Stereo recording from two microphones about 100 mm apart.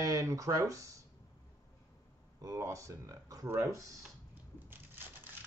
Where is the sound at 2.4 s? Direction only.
35° right (ahead or behind).